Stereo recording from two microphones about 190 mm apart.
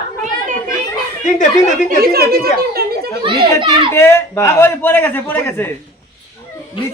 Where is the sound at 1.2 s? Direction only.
40° left (ahead or behind).